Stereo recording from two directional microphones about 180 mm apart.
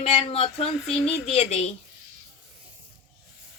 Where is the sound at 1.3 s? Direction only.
35° left (ahead or behind).